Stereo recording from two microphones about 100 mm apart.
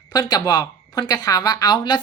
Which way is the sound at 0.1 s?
40° left (ahead or behind).